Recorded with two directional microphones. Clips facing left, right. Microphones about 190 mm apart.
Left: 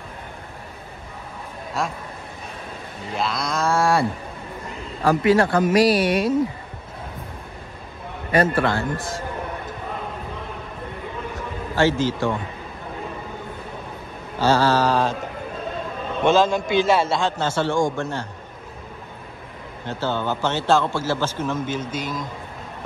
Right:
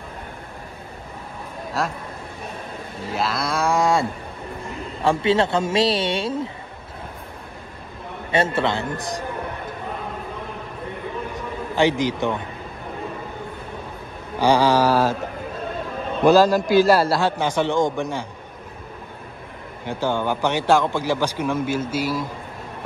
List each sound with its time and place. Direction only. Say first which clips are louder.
1.8 s a man's voice: right 1 dB; centre (ahead or behind)
3.1 s a man's voice: right 1 dB; 5° right (ahead or behind); by 6.3 s 25° right (ahead or behind)
8.3 s a man's voice: left 2 dB; 25° right (ahead or behind)
11.7 s speech: even; 15° right (ahead or behind)
14.4 s speech: right 1 dB; 15° right (ahead or behind)
16.3 s a man's voice: right 3 dB; centre (ahead or behind)
17.4 s speech: right 1 dB; 15° right (ahead or behind)
19.9 s speech: right 2 dB; 15° right (ahead or behind)